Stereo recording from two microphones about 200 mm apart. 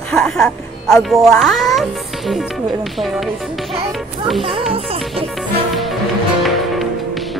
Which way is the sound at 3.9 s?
Centre (ahead or behind).